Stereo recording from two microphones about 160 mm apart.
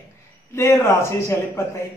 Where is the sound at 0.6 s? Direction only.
15° left (ahead or behind).